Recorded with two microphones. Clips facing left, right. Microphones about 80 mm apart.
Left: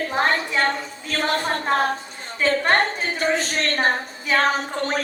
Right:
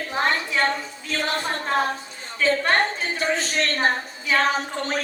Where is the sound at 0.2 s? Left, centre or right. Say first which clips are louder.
Left 1 dB; left.